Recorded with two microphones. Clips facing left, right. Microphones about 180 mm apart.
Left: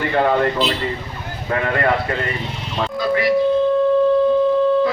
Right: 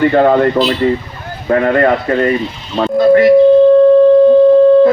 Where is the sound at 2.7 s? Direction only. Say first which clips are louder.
Right 11 dB; 45° right (ahead or behind).